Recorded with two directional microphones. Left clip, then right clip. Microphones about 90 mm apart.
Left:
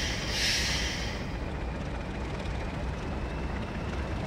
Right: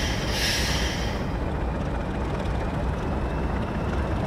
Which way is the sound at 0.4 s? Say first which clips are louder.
Right 2 dB; 40° right (ahead or behind).